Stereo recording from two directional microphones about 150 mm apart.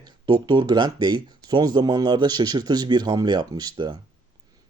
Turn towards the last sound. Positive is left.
turn(degrees=-30)  # may be behind; listen again after turning